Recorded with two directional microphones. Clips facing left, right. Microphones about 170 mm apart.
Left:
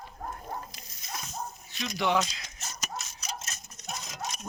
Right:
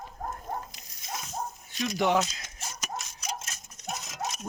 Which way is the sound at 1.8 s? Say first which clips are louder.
Right 2 dB; 45° right (ahead or behind).